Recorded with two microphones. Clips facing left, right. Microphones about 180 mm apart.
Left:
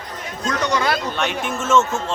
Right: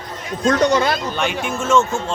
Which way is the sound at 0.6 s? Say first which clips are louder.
Right 3 dB; 25° right (ahead or behind).